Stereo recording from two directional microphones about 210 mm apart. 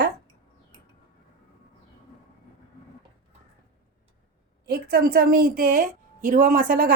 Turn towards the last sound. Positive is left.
turn(degrees=-45)  # may be behind; listen again after turning